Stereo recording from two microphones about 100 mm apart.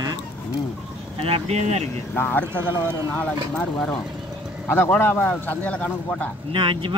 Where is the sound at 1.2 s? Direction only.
80° right.